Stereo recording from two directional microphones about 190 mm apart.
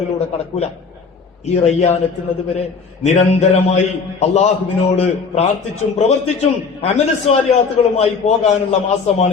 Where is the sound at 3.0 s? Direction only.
35° left (ahead or behind).